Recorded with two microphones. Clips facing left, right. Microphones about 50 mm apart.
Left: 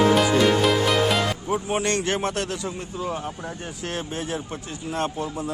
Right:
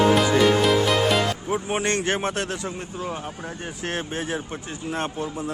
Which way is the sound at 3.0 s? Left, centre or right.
Centre.